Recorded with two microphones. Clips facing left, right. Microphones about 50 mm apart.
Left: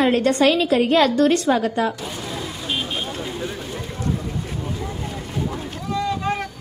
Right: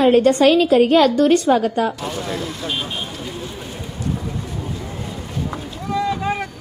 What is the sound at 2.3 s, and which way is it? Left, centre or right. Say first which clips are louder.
Speech: right 2 dB; centre.